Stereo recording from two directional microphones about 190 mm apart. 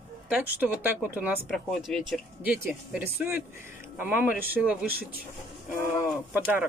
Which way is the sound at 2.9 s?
10° right (ahead or behind).